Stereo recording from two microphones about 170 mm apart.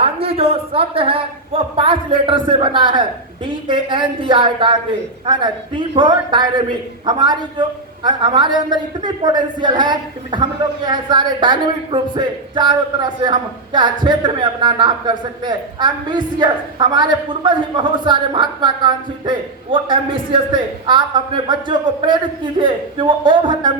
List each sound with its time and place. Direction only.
0.0 s a man's voice: 35° right (ahead or behind)